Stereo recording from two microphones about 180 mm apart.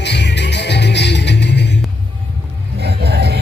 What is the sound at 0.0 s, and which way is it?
Music, 70° left (ahead or behind).